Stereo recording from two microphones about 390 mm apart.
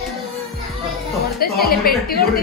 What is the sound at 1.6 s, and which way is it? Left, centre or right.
Speech, left.